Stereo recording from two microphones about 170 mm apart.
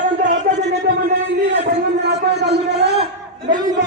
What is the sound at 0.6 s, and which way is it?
Music, 80° right.